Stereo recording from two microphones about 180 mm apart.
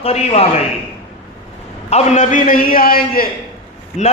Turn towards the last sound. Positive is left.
turn(degrees=40)  # may be behind; listen again after turning